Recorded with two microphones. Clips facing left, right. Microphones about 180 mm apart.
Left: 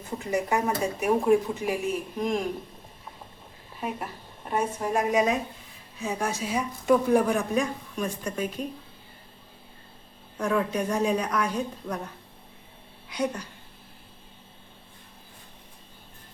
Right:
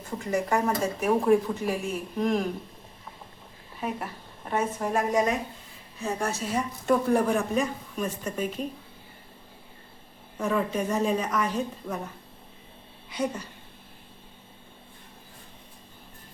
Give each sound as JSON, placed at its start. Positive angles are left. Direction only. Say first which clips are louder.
{"t": 0.3, "sound": "a woman's voice", "louder": "right 1 dB", "side_deg": 5}
{"t": 3.8, "sound": "a woman's voice", "louder": "right 1 dB", "side_deg": 0}
{"t": 10.3, "sound": "a woman's voice", "louder": "left 1 dB", "side_deg": -5}
{"t": 13.1, "sound": "a woman's voice", "louder": "left 1 dB", "side_deg": -5}